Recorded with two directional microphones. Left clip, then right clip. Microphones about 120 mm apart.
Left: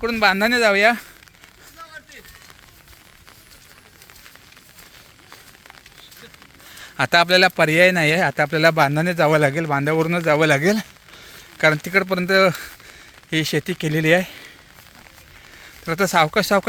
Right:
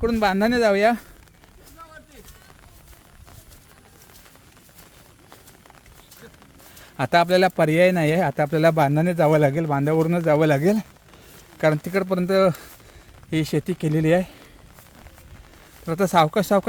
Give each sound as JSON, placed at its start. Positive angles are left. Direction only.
{"t": 0.0, "sound": "speech", "side_deg": -40}
{"t": 6.9, "sound": "a man's voice", "side_deg": -20}
{"t": 16.0, "sound": "a man's voice", "side_deg": -25}